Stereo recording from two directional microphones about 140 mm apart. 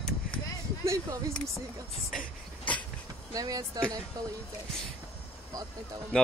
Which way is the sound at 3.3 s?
25° right (ahead or behind).